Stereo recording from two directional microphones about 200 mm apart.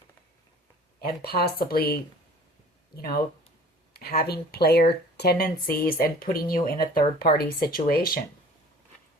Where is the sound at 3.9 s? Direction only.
50° left (ahead or behind).